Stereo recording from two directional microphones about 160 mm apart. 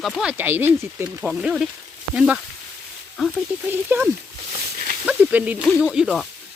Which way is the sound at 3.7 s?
10° right (ahead or behind).